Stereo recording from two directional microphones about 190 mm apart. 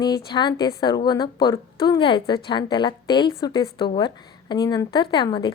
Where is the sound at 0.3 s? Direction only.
25° left (ahead or behind).